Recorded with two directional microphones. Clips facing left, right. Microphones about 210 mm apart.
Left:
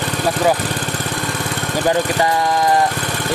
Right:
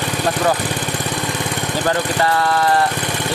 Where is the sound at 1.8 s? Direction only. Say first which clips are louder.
Left 2 dB; 15° left (ahead or behind).